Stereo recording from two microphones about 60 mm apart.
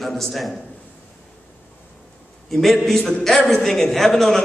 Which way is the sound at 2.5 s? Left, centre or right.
Centre.